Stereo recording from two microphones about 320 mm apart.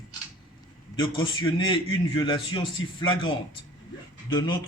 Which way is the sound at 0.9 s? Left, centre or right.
Centre.